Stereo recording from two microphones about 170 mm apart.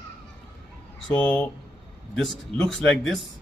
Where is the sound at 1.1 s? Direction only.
5° left (ahead or behind).